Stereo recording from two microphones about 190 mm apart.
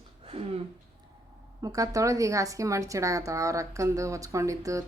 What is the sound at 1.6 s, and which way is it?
A woman's voice, 20° right (ahead or behind).